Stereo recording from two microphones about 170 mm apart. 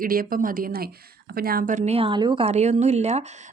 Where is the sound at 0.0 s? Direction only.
55° right (ahead or behind).